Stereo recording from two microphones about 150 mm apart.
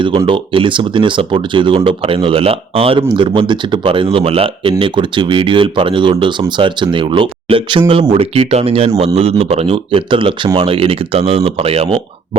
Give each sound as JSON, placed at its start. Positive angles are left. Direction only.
{"t": 0.3, "sound": "speech", "side_deg": -35}